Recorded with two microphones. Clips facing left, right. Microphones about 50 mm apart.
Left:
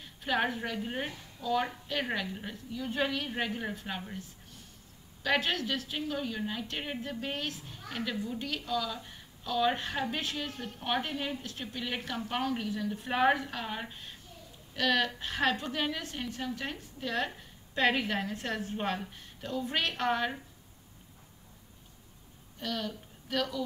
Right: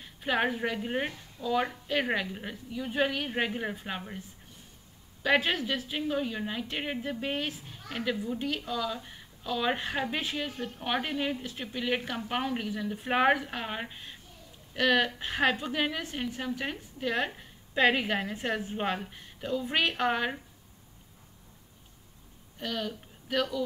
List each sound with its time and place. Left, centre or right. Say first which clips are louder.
0.0 s a sound: right 2 dB; centre
0.7 s a woman's voice: right 4 dB; centre
5.2 s a woman's voice: right 3 dB; centre
13.8 s a woman's voice: right 1 dB; centre
22.6 s a woman's voice: right 2 dB; centre